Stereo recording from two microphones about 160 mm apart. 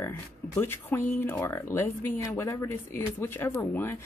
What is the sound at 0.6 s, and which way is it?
Speech, 15° left (ahead or behind).